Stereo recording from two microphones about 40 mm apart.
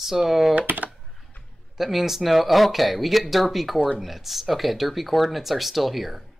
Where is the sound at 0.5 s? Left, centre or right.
Right.